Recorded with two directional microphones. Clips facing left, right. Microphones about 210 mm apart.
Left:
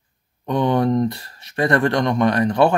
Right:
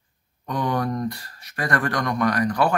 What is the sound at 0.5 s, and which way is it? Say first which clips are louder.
Speech: left 7 dB; 25° left (ahead or behind).